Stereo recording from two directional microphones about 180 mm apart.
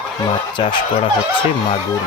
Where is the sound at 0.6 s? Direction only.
25° left (ahead or behind).